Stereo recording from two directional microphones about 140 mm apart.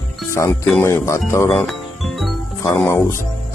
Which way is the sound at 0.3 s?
20° left (ahead or behind).